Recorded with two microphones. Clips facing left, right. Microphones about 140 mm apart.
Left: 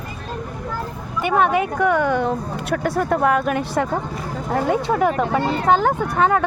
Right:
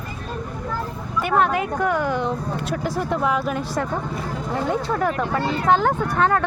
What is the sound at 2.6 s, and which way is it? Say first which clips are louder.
Speech: left 6 dB; 65° left (ahead or behind).